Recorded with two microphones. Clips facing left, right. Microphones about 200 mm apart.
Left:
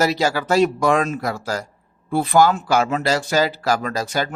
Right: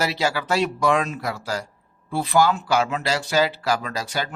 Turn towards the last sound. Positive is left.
turn(degrees=45)  # may be behind; listen again after turning